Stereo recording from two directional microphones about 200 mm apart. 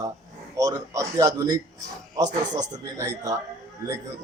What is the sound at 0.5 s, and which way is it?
A man's voice, 15° right (ahead or behind).